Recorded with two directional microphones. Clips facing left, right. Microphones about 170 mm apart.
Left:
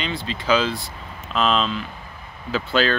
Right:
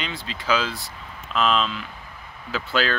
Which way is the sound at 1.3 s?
30° left (ahead or behind).